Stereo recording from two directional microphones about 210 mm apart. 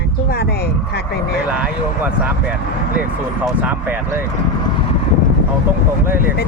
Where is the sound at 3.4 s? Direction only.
10° right (ahead or behind).